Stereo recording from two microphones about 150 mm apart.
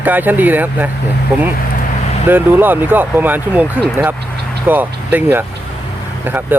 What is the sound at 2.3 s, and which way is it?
Speech, 15° right (ahead or behind).